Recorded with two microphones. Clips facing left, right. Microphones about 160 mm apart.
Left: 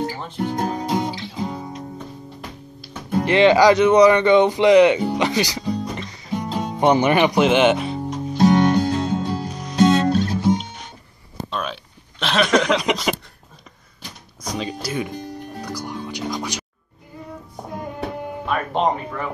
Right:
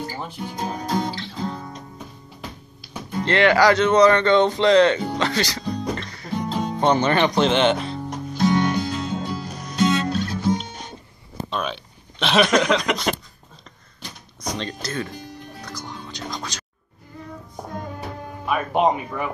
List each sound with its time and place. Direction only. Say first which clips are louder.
0.4 s speech: left 9 dB; 65° left (ahead or behind)
0.7 s guitar: left 2 dB; 20° left (ahead or behind)
3.3 s speech: left 3 dB; 15° left (ahead or behind)
8.4 s music: left 5 dB; 35° left (ahead or behind)
11.5 s hiccup: right 1 dB; centre (ahead or behind)
12.5 s a sound: left 1 dB; 5° left (ahead or behind)
14.4 s speech: left 2 dB; 5° left (ahead or behind)
15.6 s music: left 6 dB; 10° left (ahead or behind)
18.5 s speech: right 1 dB; 10° right (ahead or behind)